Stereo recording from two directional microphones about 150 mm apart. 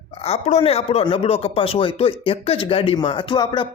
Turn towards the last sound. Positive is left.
turn(degrees=30)  # may be behind; listen again after turning